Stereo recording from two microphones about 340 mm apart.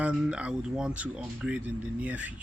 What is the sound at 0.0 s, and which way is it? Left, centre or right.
Speech, centre.